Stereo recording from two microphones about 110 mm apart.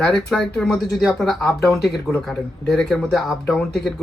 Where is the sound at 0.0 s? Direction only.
5° left (ahead or behind).